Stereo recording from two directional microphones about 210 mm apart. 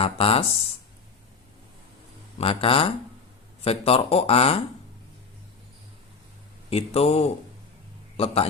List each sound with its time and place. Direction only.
0.0 s speech: 25° left (ahead or behind)
2.4 s speech: 25° left (ahead or behind)
6.7 s a man's voice: 30° left (ahead or behind)